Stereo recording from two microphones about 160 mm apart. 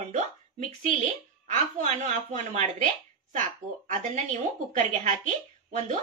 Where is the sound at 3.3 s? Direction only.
55° right (ahead or behind).